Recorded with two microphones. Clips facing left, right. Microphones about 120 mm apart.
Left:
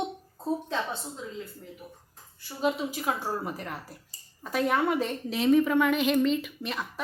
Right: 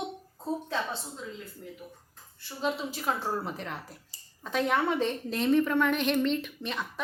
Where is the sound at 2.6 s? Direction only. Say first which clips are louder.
Left 3 dB; 10° left (ahead or behind).